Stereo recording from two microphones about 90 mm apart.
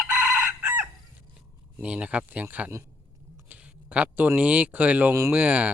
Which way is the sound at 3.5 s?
15° right (ahead or behind).